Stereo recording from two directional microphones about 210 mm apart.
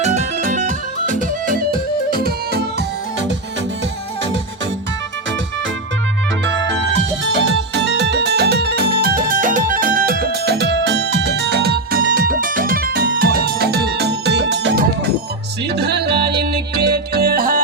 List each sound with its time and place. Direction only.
0.0 s music: 30° right (ahead or behind); by 2.8 s 50° right (ahead or behind)
7.3 s music: 55° right (ahead or behind)